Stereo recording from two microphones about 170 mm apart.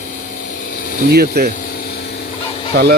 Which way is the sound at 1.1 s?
65° right (ahead or behind).